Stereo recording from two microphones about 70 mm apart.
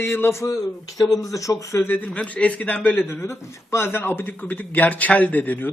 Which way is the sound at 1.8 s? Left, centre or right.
Left.